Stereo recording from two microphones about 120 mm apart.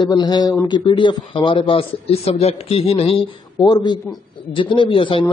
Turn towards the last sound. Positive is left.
turn(degrees=45)  # may be behind; listen again after turning